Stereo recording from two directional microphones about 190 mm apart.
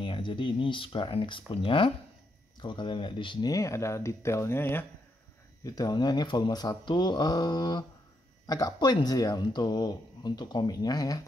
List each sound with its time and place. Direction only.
0.0 s speech: 25° left (ahead or behind)